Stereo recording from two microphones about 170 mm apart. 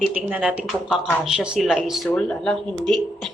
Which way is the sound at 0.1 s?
5° right (ahead or behind).